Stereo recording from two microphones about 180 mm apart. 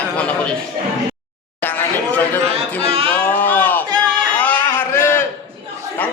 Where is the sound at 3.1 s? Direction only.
10° left (ahead or behind).